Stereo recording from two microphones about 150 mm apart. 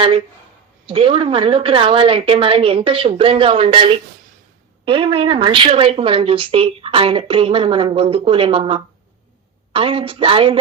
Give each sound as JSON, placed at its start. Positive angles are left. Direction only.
{"t": 0.9, "sound": "speech", "side_deg": -35}